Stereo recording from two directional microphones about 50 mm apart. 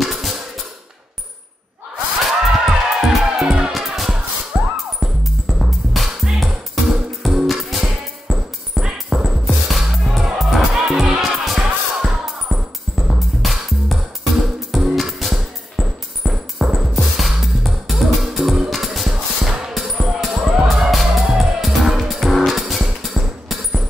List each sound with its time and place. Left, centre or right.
0.0 s music: centre
2.2 s music: centre
3.7 s music: centre
4.5 s music: right
5.0 s music: centre